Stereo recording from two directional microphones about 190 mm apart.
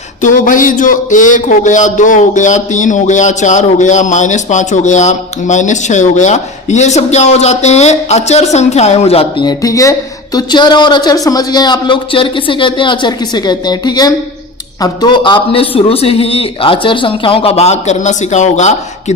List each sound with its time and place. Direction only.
0.2 s a man's voice: 45° left (ahead or behind)